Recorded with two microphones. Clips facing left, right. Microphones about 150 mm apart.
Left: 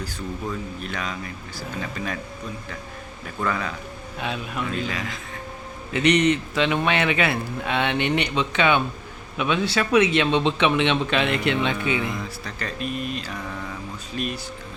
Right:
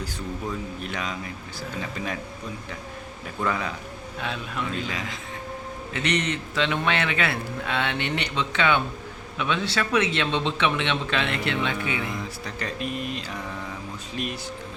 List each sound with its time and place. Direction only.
0.8 s mantra: 20° right (ahead or behind)
3.4 s a man's voice: 15° right (ahead or behind)
4.2 s a man's voice: 15° left (ahead or behind)
4.9 s mantra: 20° right (ahead or behind)
5.9 s a man's voice: 15° left (ahead or behind)
12.5 s mantra: 20° right (ahead or behind)